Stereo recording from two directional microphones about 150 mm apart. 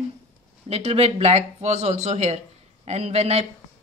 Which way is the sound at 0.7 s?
40° right (ahead or behind).